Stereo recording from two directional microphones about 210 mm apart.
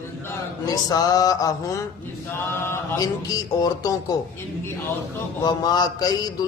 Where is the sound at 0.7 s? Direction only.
15° left (ahead or behind).